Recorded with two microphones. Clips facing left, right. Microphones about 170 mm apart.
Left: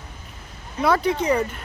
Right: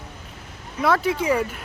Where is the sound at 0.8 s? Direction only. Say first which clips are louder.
Left 1 dB; centre (ahead or behind).